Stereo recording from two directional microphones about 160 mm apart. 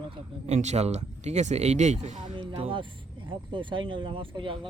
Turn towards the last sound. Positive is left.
turn(degrees=-30)  # may be behind; listen again after turning